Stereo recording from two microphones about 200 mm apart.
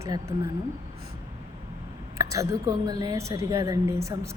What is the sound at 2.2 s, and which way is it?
A woman's voice, 15° right (ahead or behind).